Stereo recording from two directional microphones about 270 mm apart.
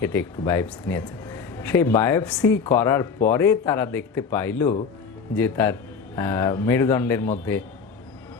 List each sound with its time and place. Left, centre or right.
0.0 s speech: centre